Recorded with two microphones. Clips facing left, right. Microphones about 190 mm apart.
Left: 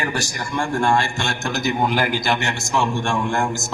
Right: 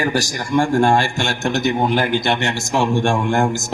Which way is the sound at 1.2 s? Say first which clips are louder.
Right 4 dB; 25° right (ahead or behind).